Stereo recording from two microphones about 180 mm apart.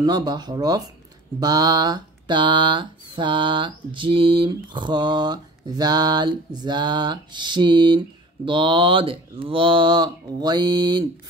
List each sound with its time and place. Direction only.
0.0 s speech: 25° right (ahead or behind)